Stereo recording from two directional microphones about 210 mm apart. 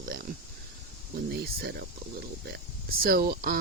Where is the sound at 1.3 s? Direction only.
50° right (ahead or behind).